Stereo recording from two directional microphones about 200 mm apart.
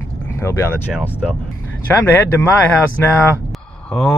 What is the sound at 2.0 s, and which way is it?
Speech, 10° left (ahead or behind).